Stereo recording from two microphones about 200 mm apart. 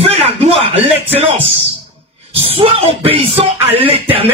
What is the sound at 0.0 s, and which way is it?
Music, 30° right (ahead or behind).